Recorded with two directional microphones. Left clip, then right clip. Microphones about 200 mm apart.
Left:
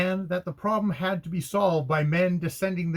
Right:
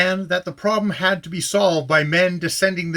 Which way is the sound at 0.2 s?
10° right (ahead or behind).